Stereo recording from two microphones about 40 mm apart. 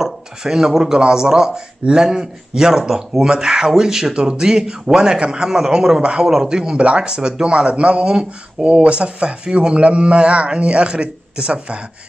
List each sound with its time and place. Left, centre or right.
0.0 s speech: centre